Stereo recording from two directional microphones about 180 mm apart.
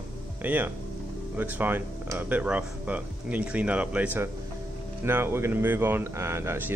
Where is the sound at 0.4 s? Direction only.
10° right (ahead or behind).